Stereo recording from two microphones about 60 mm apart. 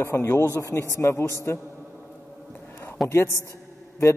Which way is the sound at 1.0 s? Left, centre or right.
Left.